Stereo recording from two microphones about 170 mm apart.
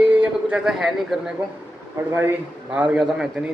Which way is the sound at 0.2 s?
5° right (ahead or behind).